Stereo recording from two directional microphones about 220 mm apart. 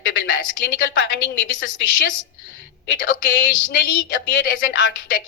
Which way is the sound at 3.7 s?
55° left (ahead or behind).